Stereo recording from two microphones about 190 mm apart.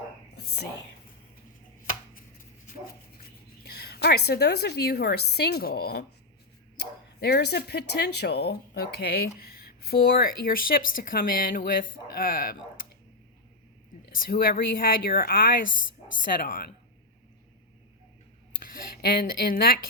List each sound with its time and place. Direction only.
0.3 s whispering: 60° left (ahead or behind)
3.6 s a woman's voice: 55° left (ahead or behind)
14.1 s speech: 50° left (ahead or behind)
18.6 s speech: 50° left (ahead or behind)